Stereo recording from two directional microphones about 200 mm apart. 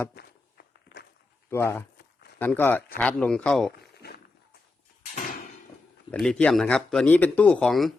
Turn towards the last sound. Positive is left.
turn(degrees=0)  # may be behind; listen again after turning